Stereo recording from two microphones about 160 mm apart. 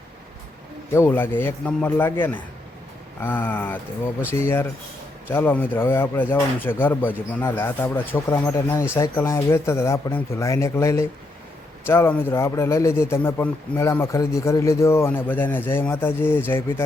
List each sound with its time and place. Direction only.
0.9 s a man's voice: 15° left (ahead or behind)